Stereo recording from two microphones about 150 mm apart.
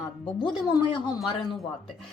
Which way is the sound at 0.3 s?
30° left (ahead or behind).